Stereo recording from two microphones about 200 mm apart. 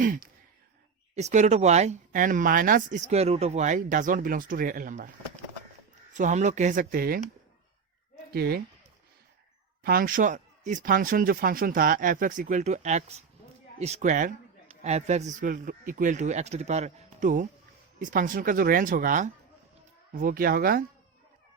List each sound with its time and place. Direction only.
0.0 s sigh: 40° right (ahead or behind)
1.1 s speech: 35° right (ahead or behind)
6.1 s speech: 35° right (ahead or behind)
8.3 s speech: 50° right (ahead or behind)
9.8 s speech: 45° right (ahead or behind)